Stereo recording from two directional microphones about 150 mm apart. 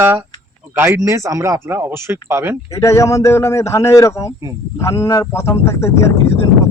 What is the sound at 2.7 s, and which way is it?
A man's voice, 20° left (ahead or behind).